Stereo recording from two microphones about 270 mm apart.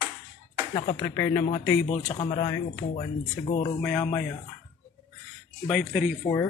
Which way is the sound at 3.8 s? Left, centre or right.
Centre.